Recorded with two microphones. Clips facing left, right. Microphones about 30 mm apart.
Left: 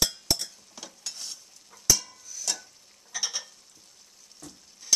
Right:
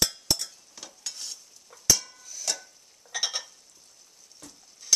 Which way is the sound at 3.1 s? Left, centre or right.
Right.